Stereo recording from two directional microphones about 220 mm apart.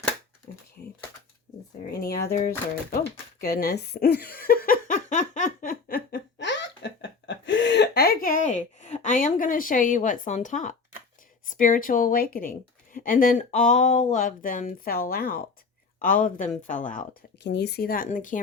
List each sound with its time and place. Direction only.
1.9 s speech: 45° left (ahead or behind)
3.0 s a sound: 45° left (ahead or behind)
11.4 s speech: 40° left (ahead or behind)
17.4 s speech: 50° left (ahead or behind)